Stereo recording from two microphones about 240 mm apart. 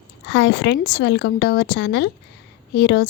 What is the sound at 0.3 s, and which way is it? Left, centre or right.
A woman's voice, left.